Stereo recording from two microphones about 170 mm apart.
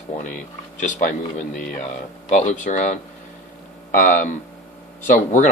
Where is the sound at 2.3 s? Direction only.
45° left (ahead or behind).